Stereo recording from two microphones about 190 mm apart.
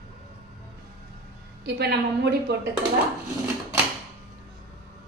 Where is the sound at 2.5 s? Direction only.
60° right (ahead or behind).